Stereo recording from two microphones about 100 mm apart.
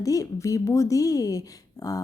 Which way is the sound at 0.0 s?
35° left (ahead or behind).